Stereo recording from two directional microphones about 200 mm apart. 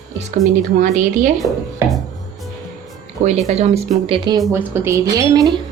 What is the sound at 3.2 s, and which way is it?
Speech, 35° right (ahead or behind).